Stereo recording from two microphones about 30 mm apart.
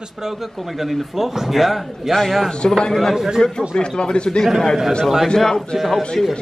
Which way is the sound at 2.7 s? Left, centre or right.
Centre.